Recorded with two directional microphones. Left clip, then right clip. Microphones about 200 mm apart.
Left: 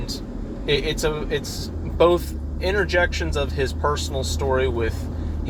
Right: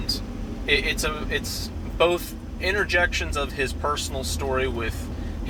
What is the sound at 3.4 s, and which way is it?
Speech, 25° left (ahead or behind).